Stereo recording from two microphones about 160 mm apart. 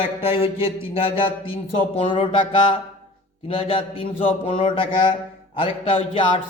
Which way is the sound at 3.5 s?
35° left (ahead or behind).